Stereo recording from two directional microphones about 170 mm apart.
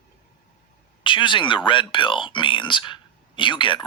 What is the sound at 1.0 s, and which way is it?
Speech, 30° left (ahead or behind).